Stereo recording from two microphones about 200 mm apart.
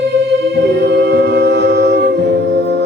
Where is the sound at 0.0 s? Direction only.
60° right (ahead or behind).